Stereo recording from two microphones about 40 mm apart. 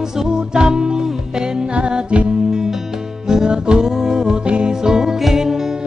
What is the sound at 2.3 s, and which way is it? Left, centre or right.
Music, centre.